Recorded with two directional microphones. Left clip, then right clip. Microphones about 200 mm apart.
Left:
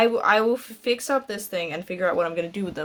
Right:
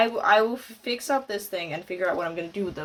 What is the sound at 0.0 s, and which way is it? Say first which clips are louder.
Speech: left 1 dB; 55° left (ahead or behind).